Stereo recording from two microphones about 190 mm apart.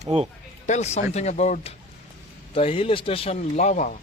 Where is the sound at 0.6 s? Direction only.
35° left (ahead or behind).